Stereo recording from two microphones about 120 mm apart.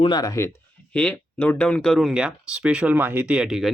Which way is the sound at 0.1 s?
30° left (ahead or behind).